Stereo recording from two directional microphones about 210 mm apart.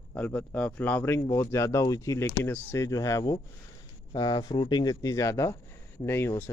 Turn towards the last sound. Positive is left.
turn(degrees=10)  # may be behind; listen again after turning